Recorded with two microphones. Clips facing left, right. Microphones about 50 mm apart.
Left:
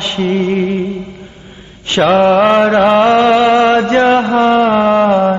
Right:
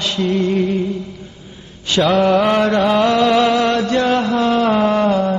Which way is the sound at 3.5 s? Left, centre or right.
Left.